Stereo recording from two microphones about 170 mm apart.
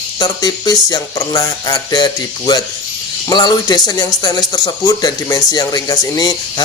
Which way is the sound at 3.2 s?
25° left (ahead or behind).